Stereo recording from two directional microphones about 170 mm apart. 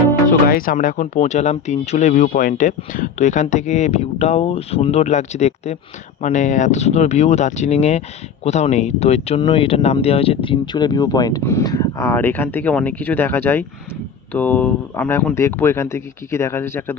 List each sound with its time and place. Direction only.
0.3 s speech: 55° left (ahead or behind); by 16.9 s 15° left (ahead or behind)